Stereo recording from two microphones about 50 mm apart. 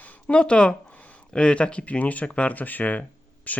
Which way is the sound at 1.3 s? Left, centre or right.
Centre.